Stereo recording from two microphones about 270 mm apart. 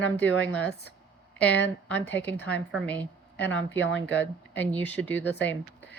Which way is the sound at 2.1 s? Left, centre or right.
Left.